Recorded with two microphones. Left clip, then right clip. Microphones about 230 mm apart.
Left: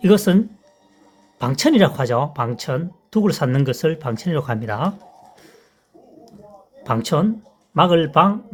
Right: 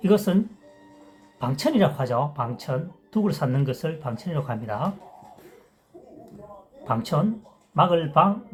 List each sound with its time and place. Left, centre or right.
0.0 s speech: left
6.8 s speech: left